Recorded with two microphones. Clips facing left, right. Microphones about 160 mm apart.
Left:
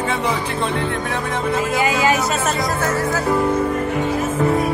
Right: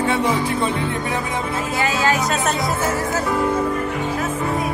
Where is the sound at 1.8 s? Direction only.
10° left (ahead or behind).